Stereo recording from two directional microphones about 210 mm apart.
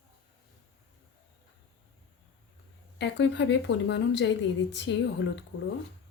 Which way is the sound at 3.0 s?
60° left (ahead or behind).